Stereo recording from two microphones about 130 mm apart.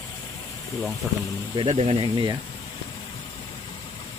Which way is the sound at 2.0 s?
40° right (ahead or behind).